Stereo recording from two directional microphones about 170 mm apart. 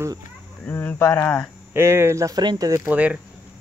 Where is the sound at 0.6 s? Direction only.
10° left (ahead or behind).